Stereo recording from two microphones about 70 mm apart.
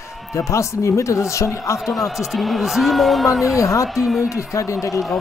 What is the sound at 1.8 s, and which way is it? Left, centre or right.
A man's voice, centre.